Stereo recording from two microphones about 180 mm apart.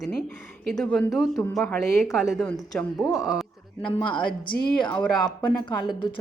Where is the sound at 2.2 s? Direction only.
15° left (ahead or behind).